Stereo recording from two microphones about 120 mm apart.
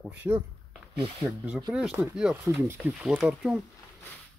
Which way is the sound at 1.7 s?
10° right (ahead or behind).